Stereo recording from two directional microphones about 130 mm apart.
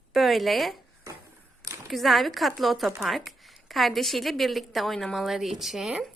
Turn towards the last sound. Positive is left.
turn(degrees=-5)  # may be behind; listen again after turning